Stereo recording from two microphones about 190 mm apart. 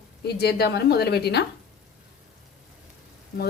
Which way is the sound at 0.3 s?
55° left (ahead or behind).